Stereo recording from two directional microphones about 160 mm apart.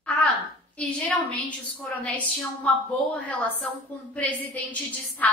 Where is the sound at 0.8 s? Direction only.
5° left (ahead or behind).